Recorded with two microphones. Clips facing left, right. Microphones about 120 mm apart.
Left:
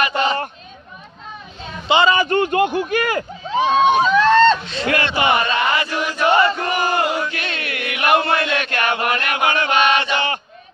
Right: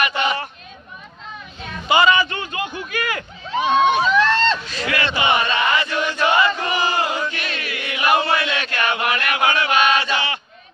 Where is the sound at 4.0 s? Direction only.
40° left (ahead or behind).